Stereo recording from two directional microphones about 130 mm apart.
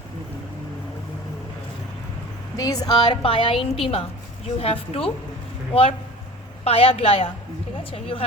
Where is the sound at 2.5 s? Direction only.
30° left (ahead or behind).